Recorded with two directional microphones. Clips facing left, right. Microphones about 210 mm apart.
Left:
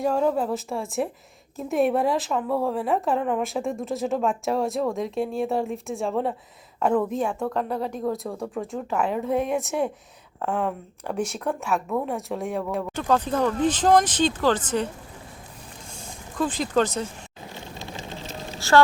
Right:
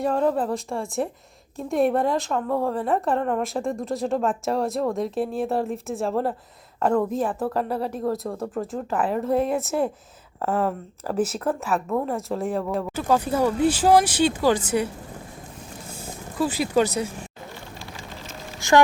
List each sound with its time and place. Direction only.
0.0 s a woman's voice: centre (ahead or behind)
15.9 s vehicle: 5° right (ahead or behind)
17.7 s sewing machine: 25° left (ahead or behind)